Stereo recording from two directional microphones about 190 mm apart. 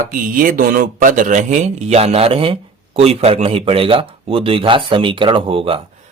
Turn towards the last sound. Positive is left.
turn(degrees=-30)  # may be behind; listen again after turning